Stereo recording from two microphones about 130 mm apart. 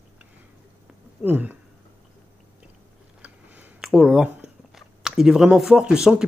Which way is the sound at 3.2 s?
10° right (ahead or behind).